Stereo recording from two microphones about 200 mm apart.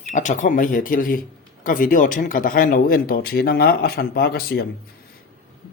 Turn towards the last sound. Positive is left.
turn(degrees=50)  # may be behind; listen again after turning